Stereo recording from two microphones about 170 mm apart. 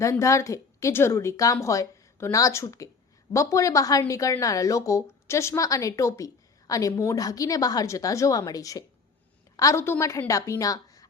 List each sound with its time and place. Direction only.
0.0 s a woman's voice: 20° left (ahead or behind)